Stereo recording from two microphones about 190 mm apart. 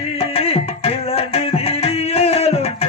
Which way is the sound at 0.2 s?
30° left (ahead or behind).